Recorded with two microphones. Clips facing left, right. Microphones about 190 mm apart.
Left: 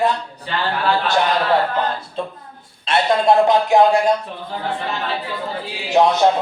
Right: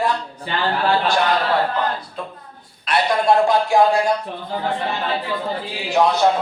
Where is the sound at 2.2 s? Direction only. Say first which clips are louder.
Left 5 dB; 25° left (ahead or behind).